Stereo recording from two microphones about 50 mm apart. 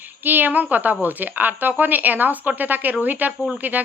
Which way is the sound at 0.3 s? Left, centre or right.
Right.